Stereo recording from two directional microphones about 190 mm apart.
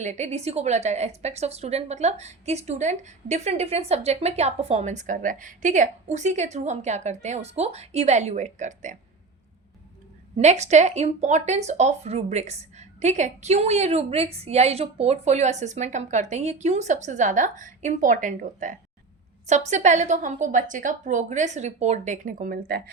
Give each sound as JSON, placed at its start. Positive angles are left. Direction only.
{"t": 0.0, "sound": "a woman's voice", "side_deg": -35}
{"t": 10.3, "sound": "a woman's voice", "side_deg": -35}